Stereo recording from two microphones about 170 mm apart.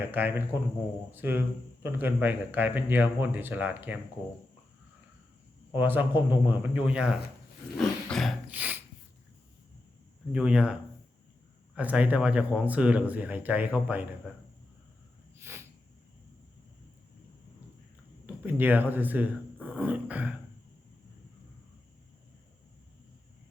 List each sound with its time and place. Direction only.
0.0 s speech: 10° right (ahead or behind)
5.7 s speech: 10° right (ahead or behind)
7.8 s roar: 5° left (ahead or behind)
8.4 s a sound: 10° right (ahead or behind)
10.3 s speech: 5° right (ahead or behind)
15.4 s snort: 15° right (ahead or behind)
18.3 s speech: 10° right (ahead or behind)